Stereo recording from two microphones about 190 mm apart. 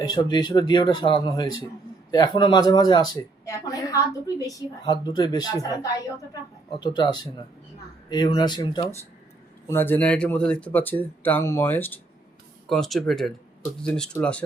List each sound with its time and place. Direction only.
0.1 s speech: 20° left (ahead or behind)
9.6 s speech: 10° left (ahead or behind)